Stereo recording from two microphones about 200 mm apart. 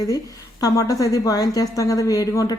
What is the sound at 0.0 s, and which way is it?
A woman's voice, 20° left (ahead or behind).